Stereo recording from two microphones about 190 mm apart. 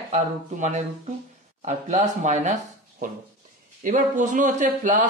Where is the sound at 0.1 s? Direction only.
40° right (ahead or behind).